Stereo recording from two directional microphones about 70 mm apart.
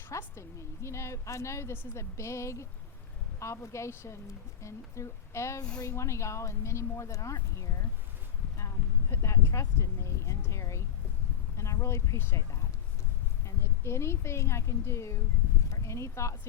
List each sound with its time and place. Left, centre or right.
0.2 s a woman's voice: left
8.5 s a sound: left
11.5 s a woman's voice: left
13.4 s a woman's voice: left